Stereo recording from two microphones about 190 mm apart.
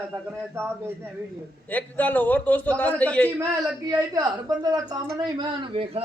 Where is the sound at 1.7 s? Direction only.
10° left (ahead or behind).